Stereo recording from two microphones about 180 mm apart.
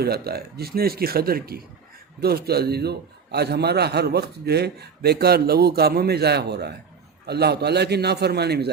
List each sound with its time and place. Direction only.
0.0 s a man's voice: 60° right (ahead or behind)